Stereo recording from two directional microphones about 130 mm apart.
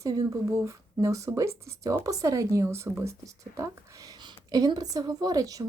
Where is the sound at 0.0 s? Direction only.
30° right (ahead or behind).